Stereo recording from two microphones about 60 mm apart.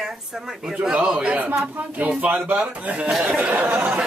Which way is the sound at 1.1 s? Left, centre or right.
Right.